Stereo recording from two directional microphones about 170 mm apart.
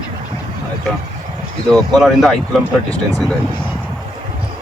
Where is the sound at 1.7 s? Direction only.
Centre (ahead or behind).